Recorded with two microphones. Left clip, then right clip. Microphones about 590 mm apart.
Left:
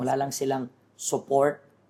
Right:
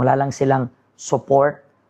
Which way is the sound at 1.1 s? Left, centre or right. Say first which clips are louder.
Right 7 dB; right.